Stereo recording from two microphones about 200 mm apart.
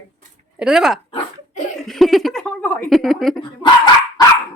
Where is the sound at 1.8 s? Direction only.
Centre (ahead or behind).